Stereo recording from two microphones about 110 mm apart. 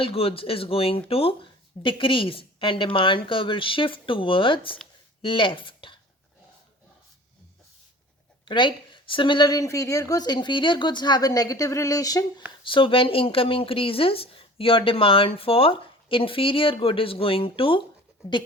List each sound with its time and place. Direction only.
0.0 s speech: 60° left (ahead or behind)
8.4 s a woman's voice: 45° left (ahead or behind)
12.6 s speech: 50° left (ahead or behind)